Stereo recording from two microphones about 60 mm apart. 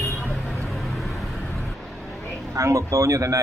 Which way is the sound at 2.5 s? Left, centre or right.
Right.